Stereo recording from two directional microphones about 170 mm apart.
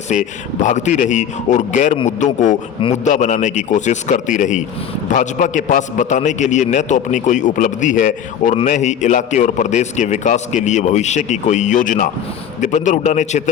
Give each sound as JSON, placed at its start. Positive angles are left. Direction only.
{"t": 0.1, "sound": "a man's voice", "side_deg": 45}